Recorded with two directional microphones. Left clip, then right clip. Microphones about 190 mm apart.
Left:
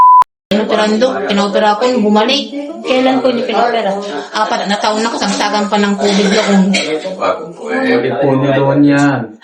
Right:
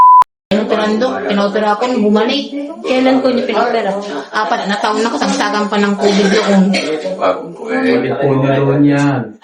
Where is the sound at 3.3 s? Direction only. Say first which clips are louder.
Left 1 dB; centre (ahead or behind).